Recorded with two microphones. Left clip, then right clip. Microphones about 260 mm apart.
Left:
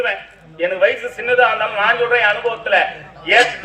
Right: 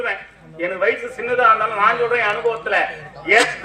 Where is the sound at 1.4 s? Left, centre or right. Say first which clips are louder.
Right 1 dB; right.